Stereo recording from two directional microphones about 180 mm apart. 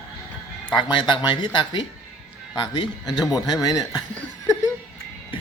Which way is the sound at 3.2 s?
20° left (ahead or behind).